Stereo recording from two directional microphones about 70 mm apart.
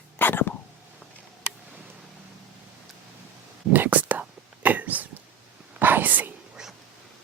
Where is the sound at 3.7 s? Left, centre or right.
Right.